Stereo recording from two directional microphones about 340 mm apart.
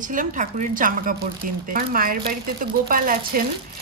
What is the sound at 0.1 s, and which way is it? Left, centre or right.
Speech, right.